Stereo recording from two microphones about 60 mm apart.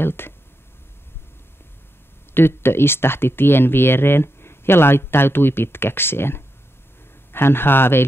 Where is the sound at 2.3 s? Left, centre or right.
Left.